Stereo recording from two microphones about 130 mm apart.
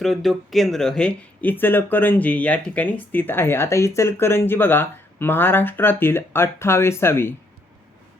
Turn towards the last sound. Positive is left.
turn(degrees=20)  # may be behind; listen again after turning